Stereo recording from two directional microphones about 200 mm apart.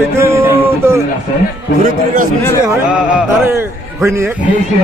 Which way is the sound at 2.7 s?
15° right (ahead or behind).